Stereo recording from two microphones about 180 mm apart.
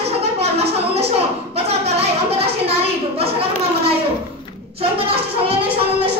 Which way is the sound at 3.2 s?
35° right (ahead or behind).